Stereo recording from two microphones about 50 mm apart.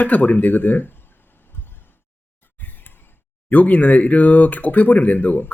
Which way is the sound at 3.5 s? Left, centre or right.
Left.